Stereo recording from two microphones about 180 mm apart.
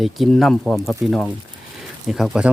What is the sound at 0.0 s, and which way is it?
Speech, centre (ahead or behind).